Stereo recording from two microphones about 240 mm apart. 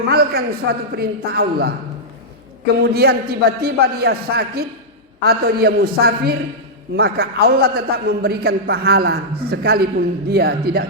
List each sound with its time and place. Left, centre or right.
0.1 s a man's voice: right
2.8 s a man's voice: right